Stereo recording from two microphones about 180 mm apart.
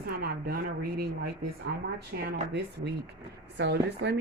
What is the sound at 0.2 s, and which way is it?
A woman's voice, 55° right (ahead or behind).